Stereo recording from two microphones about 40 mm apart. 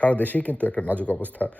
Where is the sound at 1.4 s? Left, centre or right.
Left.